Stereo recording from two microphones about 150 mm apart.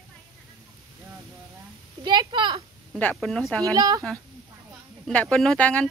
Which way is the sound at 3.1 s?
Centre (ahead or behind).